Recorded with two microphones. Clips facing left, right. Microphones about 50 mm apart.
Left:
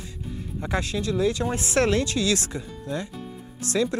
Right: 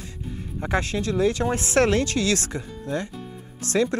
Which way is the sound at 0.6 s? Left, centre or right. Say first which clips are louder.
Right 3 dB; right.